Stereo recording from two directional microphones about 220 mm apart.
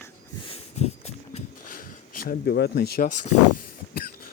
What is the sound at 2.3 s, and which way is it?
Speech, 45° left (ahead or behind).